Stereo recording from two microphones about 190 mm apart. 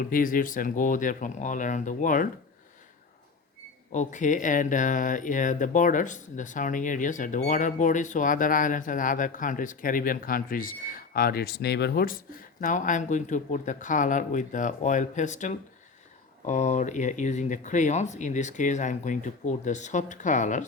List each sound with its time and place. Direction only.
0.0 s speech: 45° left (ahead or behind)
3.9 s speech: 40° left (ahead or behind)
12.5 s speech: 40° left (ahead or behind)